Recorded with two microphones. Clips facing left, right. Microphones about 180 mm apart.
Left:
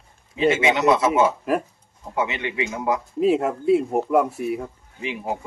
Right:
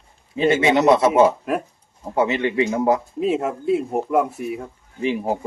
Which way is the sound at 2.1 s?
35° right (ahead or behind).